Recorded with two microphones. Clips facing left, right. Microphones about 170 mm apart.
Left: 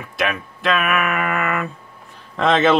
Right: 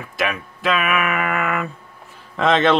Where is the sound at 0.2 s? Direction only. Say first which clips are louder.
Left 1 dB; centre (ahead or behind).